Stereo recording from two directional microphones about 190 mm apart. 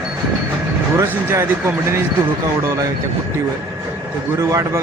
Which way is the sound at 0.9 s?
15° right (ahead or behind).